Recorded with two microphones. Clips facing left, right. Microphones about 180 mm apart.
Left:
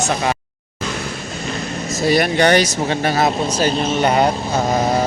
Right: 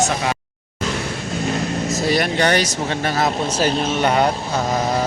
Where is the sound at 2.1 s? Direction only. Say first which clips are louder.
Left 5 dB; 20° left (ahead or behind).